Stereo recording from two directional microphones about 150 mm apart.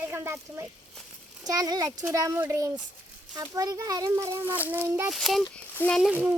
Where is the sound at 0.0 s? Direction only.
15° right (ahead or behind).